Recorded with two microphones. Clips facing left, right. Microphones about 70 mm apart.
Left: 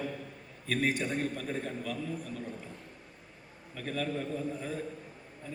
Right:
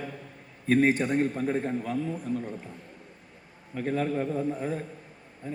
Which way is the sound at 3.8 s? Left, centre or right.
Right.